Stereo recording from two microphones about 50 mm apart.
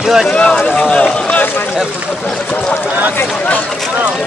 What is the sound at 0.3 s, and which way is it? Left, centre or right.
Speech, left.